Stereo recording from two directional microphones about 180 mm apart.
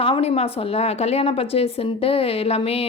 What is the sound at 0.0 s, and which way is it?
A woman's voice, 35° left (ahead or behind).